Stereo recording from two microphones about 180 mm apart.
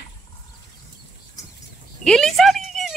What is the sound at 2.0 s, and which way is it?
Speech, centre (ahead or behind).